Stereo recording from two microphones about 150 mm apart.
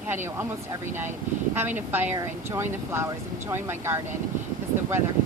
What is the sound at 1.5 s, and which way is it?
Speech, 15° right (ahead or behind).